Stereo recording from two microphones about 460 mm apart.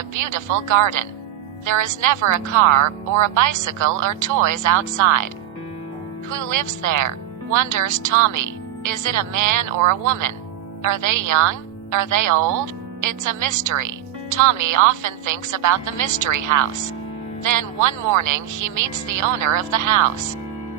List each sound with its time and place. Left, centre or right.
0.1 s speech: right
6.5 s speech: right
17.4 s speech: right